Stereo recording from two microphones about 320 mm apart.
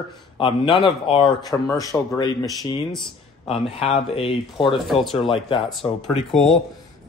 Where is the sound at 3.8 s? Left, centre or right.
Centre.